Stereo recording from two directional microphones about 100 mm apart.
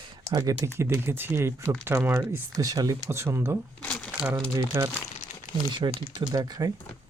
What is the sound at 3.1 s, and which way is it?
Speech, 25° right (ahead or behind).